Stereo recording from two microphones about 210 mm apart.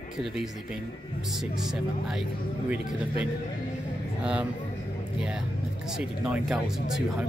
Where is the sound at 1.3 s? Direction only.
Centre (ahead or behind).